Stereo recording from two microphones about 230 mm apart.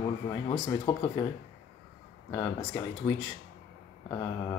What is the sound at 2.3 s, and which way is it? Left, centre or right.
Speech, left.